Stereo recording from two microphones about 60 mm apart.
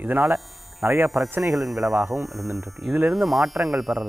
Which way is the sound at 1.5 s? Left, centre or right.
Centre.